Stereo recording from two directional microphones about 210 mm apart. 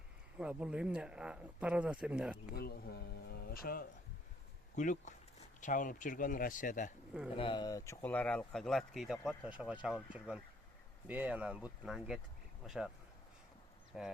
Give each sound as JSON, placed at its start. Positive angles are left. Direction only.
{"t": 0.3, "sound": "speech", "side_deg": -5}
{"t": 2.6, "sound": "speech", "side_deg": 50}
{"t": 7.3, "sound": "speech", "side_deg": 25}
{"t": 13.9, "sound": "speech", "side_deg": 0}